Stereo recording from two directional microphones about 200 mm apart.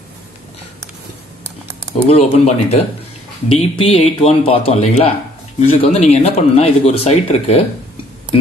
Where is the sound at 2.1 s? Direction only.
30° left (ahead or behind).